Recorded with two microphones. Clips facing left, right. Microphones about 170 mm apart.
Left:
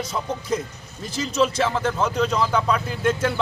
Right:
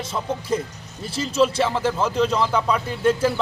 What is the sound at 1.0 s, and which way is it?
Speech, 30° right (ahead or behind).